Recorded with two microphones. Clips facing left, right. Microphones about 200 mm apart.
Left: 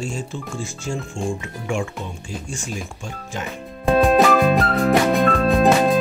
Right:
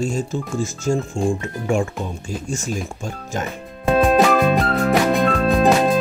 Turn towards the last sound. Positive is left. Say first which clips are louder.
# even
turn(degrees=0)  # may be behind; listen again after turning